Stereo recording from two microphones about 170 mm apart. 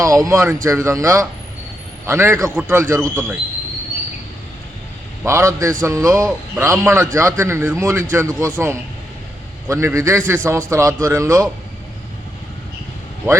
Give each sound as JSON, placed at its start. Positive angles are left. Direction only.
{"t": 0.0, "sound": "a man's voice", "side_deg": -20}
{"t": 5.2, "sound": "a man's voice", "side_deg": -15}